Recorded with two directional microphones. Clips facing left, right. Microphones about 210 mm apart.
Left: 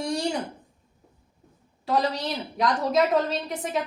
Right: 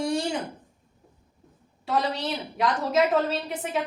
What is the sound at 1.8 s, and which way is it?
A woman's voice, centre (ahead or behind).